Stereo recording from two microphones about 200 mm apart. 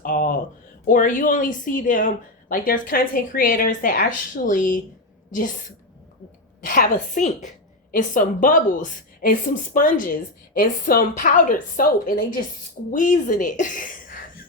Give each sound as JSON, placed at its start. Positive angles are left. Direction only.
{"t": 0.0, "sound": "a sound", "side_deg": 45}
{"t": 0.9, "sound": "speech", "side_deg": 40}
{"t": 6.7, "sound": "a woman's voice", "side_deg": 40}